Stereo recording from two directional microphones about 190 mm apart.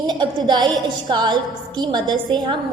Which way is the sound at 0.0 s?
20° right (ahead or behind).